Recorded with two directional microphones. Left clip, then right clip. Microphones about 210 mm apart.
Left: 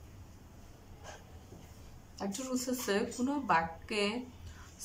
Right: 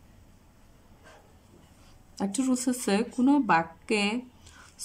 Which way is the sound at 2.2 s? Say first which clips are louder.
Right 8 dB; 50° right (ahead or behind).